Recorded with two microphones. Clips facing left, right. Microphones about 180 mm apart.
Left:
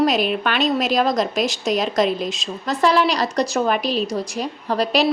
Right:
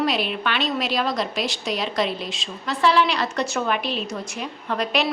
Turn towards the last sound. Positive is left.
turn(degrees=35)  # may be behind; listen again after turning